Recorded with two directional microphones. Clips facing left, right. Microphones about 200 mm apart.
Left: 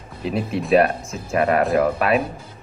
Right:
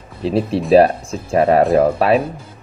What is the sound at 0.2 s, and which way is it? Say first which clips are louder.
Speech: right 6 dB; 30° right (ahead or behind).